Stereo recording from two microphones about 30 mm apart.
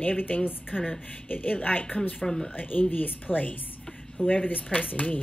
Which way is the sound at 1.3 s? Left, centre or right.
Left.